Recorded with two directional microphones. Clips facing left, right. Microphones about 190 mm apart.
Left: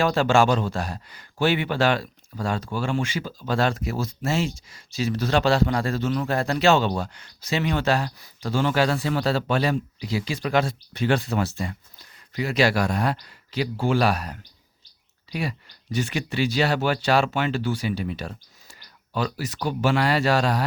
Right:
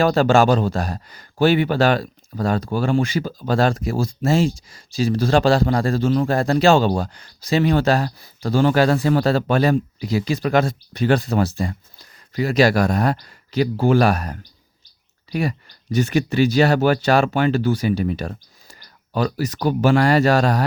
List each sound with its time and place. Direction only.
0.0 s speech: 35° right (ahead or behind)